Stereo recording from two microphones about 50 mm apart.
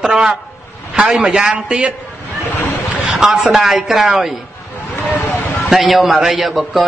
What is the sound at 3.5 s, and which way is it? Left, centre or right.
Speech, centre.